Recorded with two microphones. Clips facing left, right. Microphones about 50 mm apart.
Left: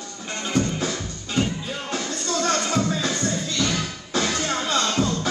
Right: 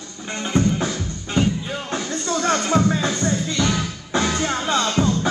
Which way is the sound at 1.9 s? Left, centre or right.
Right.